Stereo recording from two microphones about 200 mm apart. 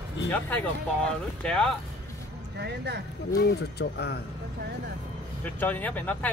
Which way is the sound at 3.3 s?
55° left (ahead or behind).